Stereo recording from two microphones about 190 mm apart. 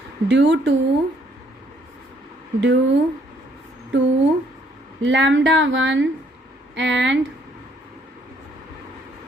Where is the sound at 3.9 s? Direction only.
80° right.